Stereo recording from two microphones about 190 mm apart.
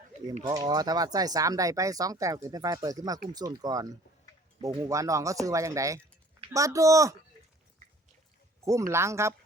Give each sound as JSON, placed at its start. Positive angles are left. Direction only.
{"t": 0.4, "sound": "speech", "side_deg": -20}
{"t": 4.9, "sound": "speech", "side_deg": -15}
{"t": 8.6, "sound": "speech", "side_deg": -15}